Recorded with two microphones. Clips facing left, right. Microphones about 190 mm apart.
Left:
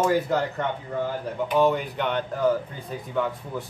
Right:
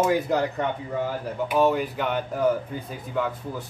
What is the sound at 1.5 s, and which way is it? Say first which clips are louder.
Speech: even; 5° right (ahead or behind).